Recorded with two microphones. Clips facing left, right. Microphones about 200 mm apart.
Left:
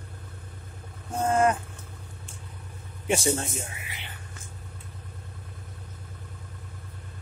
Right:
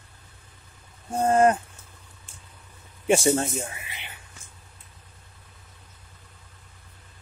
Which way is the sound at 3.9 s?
20° right (ahead or behind).